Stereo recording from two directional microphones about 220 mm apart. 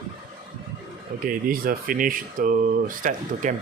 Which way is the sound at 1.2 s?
40° right (ahead or behind).